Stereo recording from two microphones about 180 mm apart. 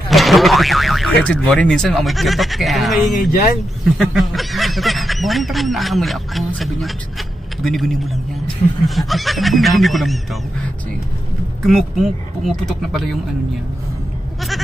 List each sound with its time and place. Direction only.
0.1 s boing: centre (ahead or behind)
1.2 s speech: 5° left (ahead or behind)
3.3 s speech: 50° left (ahead or behind)
3.8 s speech: centre (ahead or behind)
11.6 s speech: centre (ahead or behind)